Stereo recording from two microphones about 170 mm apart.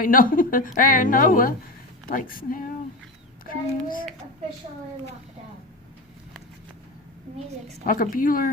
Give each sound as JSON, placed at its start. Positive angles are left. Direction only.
{"t": 0.0, "sound": "a woman's voice", "side_deg": 55}
{"t": 7.9, "sound": "speech", "side_deg": 55}